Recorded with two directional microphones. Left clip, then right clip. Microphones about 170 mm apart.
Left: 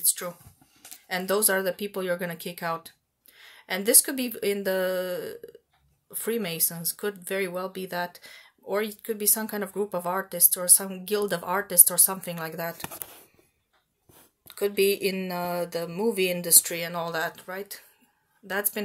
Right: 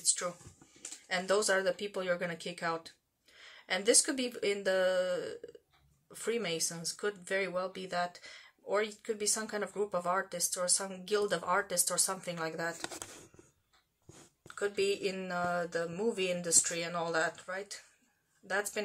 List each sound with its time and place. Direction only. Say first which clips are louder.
0.0 s a sound: left 3 dB; 45° left (ahead or behind)
1.0 s speech: left 4 dB; 45° left (ahead or behind)
14.5 s speech: left 8 dB; 45° left (ahead or behind)